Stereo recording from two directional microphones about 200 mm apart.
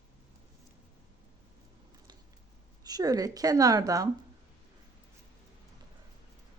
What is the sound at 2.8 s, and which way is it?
A woman's voice, 20° right (ahead or behind).